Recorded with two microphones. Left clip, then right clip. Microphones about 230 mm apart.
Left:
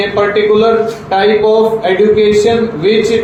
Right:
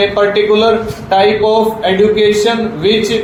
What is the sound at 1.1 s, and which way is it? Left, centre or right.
A man's voice, right.